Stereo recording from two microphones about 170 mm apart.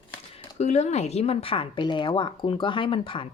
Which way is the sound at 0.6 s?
40° left (ahead or behind).